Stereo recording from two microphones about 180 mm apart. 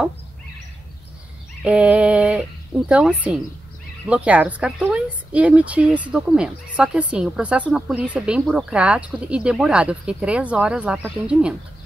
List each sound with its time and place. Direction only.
1.6 s a woman's voice: 5° right (ahead or behind)